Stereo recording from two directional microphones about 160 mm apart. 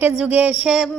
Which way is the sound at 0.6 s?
Centre (ahead or behind).